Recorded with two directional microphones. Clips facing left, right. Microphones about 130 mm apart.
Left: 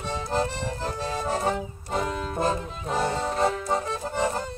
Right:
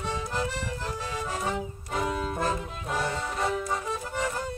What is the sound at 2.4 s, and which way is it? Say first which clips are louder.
Music: left 3 dB; 30° left (ahead or behind).